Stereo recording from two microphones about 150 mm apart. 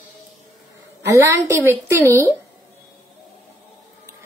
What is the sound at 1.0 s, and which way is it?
A woman's voice, 20° right (ahead or behind).